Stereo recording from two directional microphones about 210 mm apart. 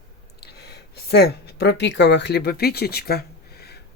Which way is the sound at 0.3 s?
50° left (ahead or behind).